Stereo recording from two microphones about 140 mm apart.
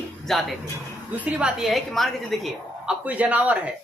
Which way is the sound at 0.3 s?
Centre (ahead or behind).